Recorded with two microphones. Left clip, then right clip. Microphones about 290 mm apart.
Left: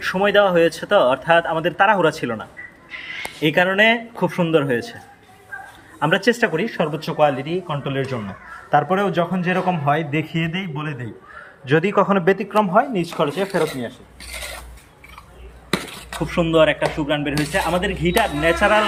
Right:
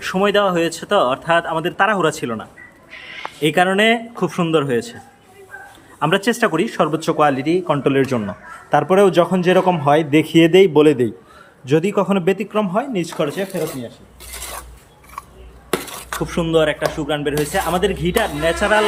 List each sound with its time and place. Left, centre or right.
0.0 s speech: centre
6.0 s speech: centre
16.2 s speech: centre